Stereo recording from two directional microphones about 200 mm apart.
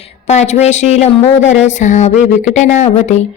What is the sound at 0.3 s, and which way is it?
Speech, 35° left (ahead or behind).